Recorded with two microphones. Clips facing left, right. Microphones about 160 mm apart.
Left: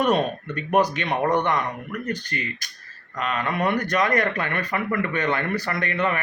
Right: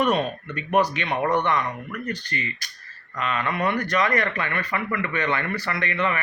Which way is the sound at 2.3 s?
50° left (ahead or behind).